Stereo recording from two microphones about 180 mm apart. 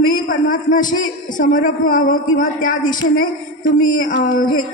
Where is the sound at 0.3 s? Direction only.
45° left (ahead or behind).